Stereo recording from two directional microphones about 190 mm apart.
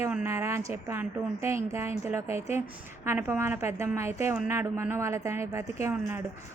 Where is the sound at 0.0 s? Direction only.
10° right (ahead or behind).